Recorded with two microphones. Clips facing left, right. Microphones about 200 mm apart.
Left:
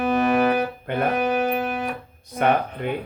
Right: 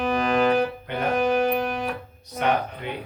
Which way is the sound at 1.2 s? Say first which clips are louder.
Right 1 dB; 5° left (ahead or behind).